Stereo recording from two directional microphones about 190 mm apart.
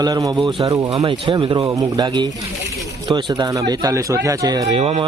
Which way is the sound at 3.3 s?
20° right (ahead or behind).